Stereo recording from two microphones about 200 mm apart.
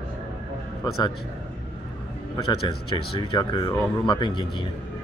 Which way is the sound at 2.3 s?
25° left (ahead or behind).